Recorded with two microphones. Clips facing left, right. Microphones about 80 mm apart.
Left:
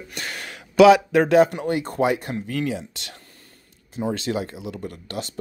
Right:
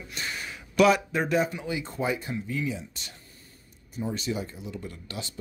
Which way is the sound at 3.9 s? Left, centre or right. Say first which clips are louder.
Left 6 dB; left.